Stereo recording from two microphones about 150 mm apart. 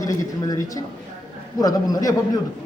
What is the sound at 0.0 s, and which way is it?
A man's voice, 20° left (ahead or behind).